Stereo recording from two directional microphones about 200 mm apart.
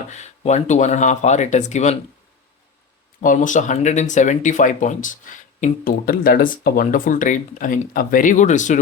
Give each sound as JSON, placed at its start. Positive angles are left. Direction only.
{"t": 0.1, "sound": "speech", "side_deg": 35}
{"t": 3.2, "sound": "speech", "side_deg": 40}